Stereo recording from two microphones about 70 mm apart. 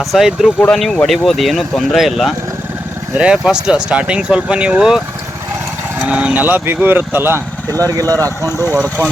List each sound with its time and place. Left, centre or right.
0.0 s speech: centre
0.7 s speech: centre
6.1 s speech: centre; by 7.4 s right
7.7 s speech: right
8.4 s speech: left